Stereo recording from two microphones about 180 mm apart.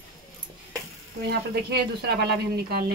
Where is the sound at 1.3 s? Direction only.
65° right (ahead or behind).